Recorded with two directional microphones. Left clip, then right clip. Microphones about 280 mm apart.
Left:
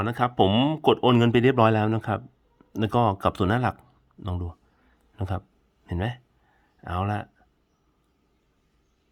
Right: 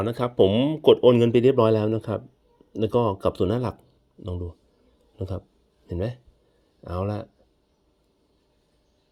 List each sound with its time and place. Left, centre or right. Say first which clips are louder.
0.0 s speech: right 2 dB; centre
6.8 s speech: left 1 dB; centre